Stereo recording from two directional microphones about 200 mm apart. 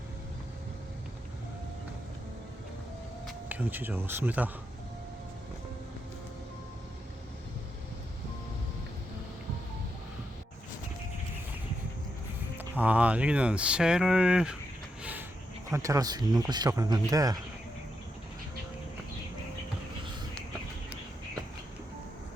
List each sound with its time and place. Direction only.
3.2 s speech: 10° right (ahead or behind)
12.5 s speech: 10° right (ahead or behind)
15.7 s speech: 15° right (ahead or behind)